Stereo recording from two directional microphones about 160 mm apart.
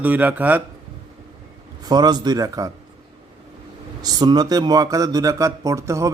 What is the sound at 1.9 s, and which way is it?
Speech, 25° right (ahead or behind).